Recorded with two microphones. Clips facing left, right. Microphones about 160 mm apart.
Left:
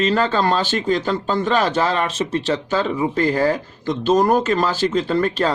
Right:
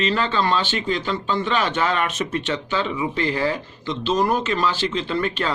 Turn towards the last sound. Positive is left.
turn(degrees=40)  # may be behind; listen again after turning